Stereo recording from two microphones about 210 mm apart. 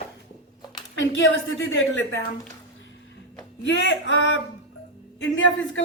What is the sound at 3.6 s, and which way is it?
A woman's voice, 60° left (ahead or behind).